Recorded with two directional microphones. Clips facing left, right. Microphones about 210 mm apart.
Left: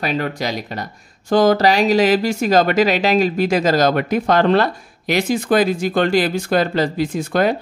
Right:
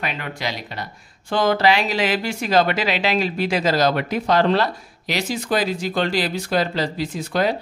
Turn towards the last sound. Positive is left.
turn(degrees=50)  # may be behind; listen again after turning